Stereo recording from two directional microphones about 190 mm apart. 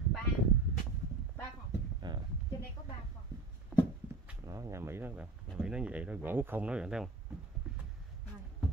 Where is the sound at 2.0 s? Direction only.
25° right (ahead or behind).